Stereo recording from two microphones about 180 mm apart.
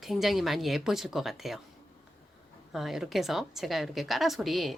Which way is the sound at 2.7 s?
Centre (ahead or behind).